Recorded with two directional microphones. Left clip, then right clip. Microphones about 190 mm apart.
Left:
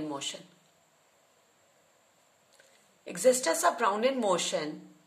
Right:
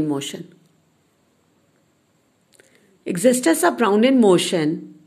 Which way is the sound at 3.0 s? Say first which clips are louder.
Right 8 dB; 40° right (ahead or behind).